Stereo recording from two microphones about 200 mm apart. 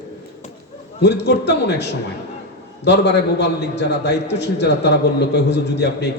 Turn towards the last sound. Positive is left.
turn(degrees=60)  # may be behind; listen again after turning